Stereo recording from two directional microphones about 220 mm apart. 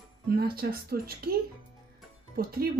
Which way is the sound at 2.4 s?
45° right (ahead or behind).